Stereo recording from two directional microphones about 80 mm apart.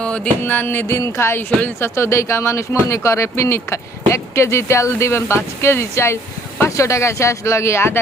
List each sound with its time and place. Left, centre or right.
0.0 s speech: centre
2.0 s speech: left